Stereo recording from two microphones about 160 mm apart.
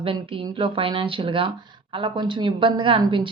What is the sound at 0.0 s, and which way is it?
Speech, 35° right (ahead or behind).